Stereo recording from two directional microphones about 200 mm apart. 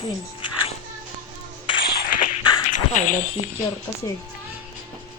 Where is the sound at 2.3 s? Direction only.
40° left (ahead or behind).